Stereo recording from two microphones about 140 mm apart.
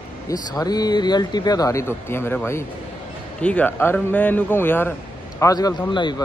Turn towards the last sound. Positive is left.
turn(degrees=30)  # may be behind; listen again after turning